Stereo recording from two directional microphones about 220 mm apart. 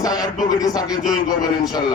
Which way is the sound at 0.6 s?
15° left (ahead or behind).